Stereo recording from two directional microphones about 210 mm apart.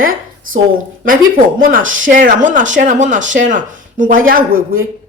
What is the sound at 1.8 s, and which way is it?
Speech, 65° right (ahead or behind).